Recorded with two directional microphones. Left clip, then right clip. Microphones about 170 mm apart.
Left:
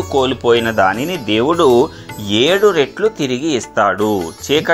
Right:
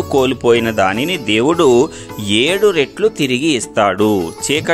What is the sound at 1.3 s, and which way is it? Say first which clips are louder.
Speech: even; 35° right (ahead or behind).